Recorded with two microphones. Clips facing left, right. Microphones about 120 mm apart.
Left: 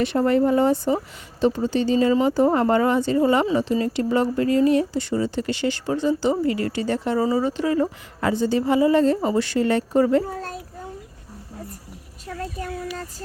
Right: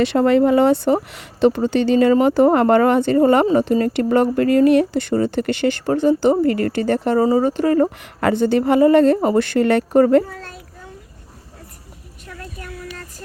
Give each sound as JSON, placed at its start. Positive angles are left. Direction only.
{"t": 0.0, "sound": "speech", "side_deg": -90}
{"t": 10.2, "sound": "a child's voice", "side_deg": 35}
{"t": 12.3, "sound": "a sound", "side_deg": 25}